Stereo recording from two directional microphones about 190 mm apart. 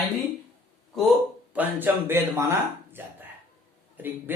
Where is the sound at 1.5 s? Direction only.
10° right (ahead or behind).